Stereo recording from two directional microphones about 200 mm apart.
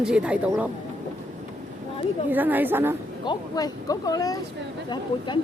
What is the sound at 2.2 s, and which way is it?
Speech, 10° right (ahead or behind).